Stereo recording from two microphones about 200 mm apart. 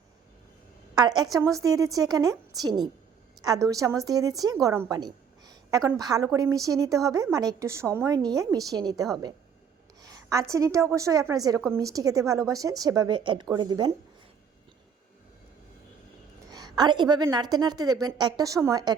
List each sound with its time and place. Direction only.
0.9 s a woman's voice: 20° right (ahead or behind)
16.5 s a woman's voice: 20° right (ahead or behind)